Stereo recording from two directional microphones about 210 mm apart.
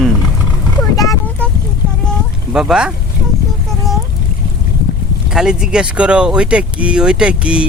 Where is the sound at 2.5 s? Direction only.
5° right (ahead or behind).